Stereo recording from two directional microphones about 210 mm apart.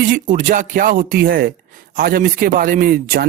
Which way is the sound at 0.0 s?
40° right (ahead or behind).